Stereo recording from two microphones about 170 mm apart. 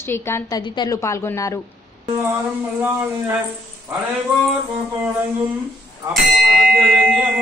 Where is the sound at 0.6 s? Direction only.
25° left (ahead or behind).